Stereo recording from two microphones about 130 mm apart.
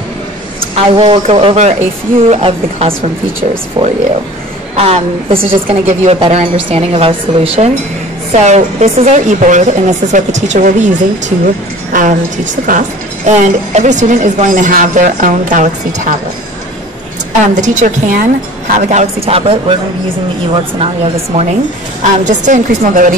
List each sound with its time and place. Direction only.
0.7 s a woman's voice: 45° right (ahead or behind)
3.8 s speech: 35° right (ahead or behind)
4.7 s a woman's voice: 50° right (ahead or behind); by 16.2 s 85° right
17.6 s a woman's voice: 70° right (ahead or behind); by 21.5 s 45° right (ahead or behind)
22.0 s a woman's voice: 70° right (ahead or behind); by 23.1 s 90° right